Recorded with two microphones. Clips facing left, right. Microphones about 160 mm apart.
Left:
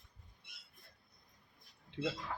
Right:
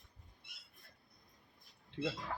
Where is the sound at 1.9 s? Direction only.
Centre (ahead or behind).